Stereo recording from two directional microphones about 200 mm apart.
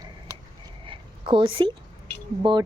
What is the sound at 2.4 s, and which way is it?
Speech, 20° right (ahead or behind).